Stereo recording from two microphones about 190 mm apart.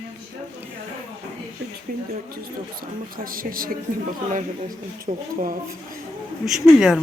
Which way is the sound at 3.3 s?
50° right (ahead or behind).